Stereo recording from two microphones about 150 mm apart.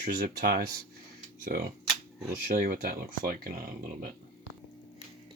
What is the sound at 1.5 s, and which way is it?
Speech, 70° right (ahead or behind).